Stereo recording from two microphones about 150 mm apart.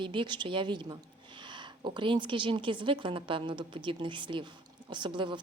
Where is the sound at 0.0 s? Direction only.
35° right (ahead or behind).